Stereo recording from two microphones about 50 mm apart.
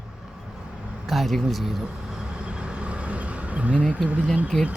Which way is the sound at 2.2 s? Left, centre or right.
Centre.